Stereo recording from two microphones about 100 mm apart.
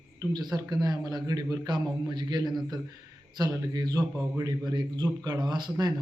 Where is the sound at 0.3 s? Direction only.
45° right (ahead or behind).